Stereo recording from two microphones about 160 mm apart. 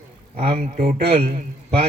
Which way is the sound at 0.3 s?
45° right (ahead or behind).